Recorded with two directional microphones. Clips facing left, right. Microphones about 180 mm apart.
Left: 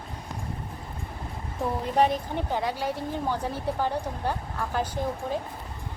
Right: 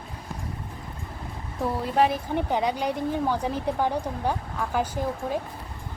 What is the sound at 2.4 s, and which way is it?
A woman's voice, 15° right (ahead or behind).